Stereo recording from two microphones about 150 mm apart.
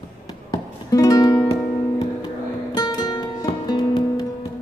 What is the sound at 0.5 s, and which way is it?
Music, 25° left (ahead or behind).